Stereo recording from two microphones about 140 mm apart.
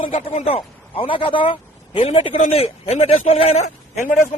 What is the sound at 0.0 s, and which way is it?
A man's voice, 45° left (ahead or behind).